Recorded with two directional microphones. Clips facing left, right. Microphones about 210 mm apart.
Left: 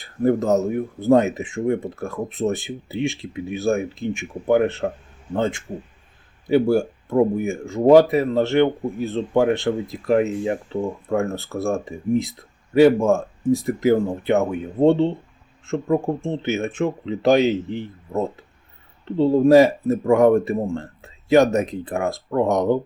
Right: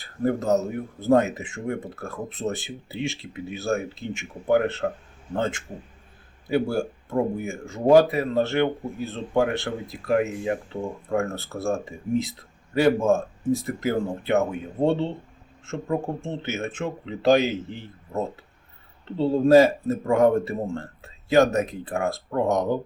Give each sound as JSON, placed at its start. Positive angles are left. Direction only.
{"t": 0.3, "sound": "speech", "side_deg": 20}
{"t": 6.5, "sound": "speech", "side_deg": 20}